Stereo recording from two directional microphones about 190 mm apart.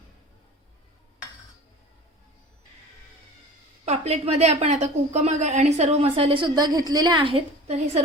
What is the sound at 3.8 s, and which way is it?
A woman's voice, 35° right (ahead or behind).